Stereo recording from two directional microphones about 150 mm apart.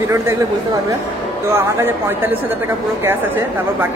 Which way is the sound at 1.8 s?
15° right (ahead or behind).